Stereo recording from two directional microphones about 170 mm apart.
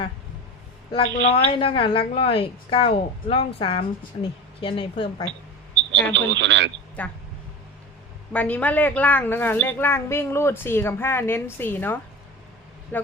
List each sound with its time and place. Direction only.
1.2 s a woman's voice: 35° left (ahead or behind)
6.1 s speech: 90° right
7.0 s speech: 10° left (ahead or behind)
8.3 s speech: 10° left (ahead or behind)